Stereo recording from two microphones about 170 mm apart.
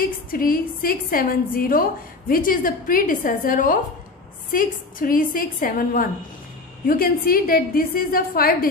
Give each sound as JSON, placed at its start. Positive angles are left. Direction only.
{"t": 0.0, "sound": "a woman's voice", "side_deg": 55}